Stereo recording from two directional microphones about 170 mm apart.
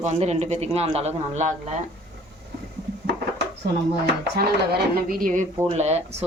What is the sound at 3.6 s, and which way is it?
Speech, 75° right (ahead or behind).